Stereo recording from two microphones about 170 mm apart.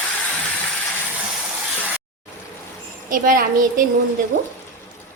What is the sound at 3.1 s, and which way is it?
Speech, 55° right (ahead or behind).